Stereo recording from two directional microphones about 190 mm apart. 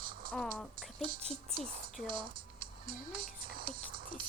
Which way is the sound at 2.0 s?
25° right (ahead or behind).